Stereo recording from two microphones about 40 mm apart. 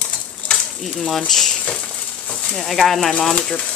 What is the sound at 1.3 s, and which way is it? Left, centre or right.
Speech, centre.